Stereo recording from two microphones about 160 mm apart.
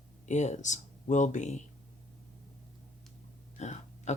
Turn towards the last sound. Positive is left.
turn(degrees=45)  # may be behind; listen again after turning